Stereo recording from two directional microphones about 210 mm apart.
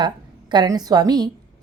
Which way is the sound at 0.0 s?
20° right (ahead or behind).